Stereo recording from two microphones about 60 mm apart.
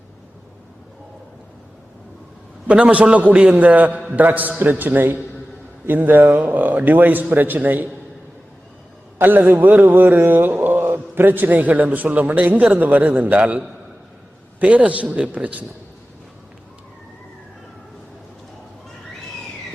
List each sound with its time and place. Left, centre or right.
2.6 s a man's voice: right
9.1 s speech: right
14.6 s a man's voice: right